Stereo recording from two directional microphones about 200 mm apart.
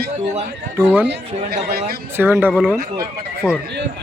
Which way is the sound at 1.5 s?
35° right (ahead or behind).